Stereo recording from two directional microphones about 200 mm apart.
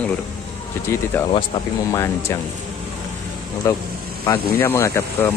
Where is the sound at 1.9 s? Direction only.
10° left (ahead or behind).